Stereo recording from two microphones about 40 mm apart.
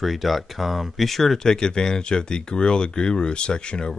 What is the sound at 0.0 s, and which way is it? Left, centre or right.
Speech, centre.